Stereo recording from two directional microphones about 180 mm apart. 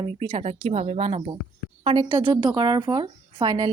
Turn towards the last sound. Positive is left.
turn(degrees=-25)  # may be behind; listen again after turning